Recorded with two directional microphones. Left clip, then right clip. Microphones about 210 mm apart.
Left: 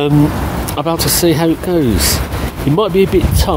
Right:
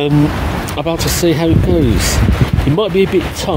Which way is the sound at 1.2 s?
Centre (ahead or behind).